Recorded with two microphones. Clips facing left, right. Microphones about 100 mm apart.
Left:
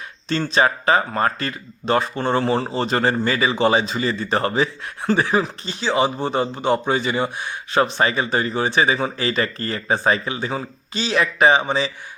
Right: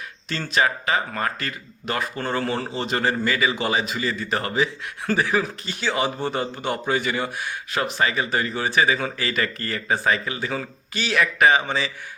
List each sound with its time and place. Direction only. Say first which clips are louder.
0.3 s speech: left 4 dB; 30° left (ahead or behind)